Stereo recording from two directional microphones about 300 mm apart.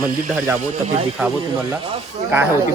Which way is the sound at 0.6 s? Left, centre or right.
Right.